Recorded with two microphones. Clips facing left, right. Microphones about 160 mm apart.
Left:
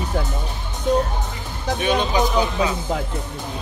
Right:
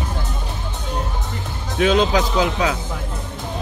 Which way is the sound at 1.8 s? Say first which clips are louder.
Right 4 dB; 90° right.